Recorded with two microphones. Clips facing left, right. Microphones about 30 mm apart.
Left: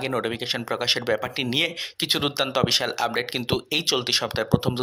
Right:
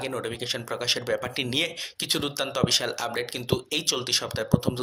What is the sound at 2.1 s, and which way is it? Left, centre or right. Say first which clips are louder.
Speech: left 4 dB; left.